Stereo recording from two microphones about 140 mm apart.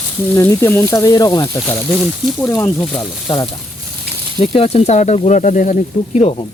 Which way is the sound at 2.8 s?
5° left (ahead or behind).